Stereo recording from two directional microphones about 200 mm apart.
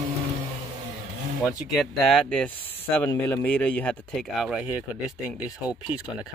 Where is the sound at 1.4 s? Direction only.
Centre (ahead or behind).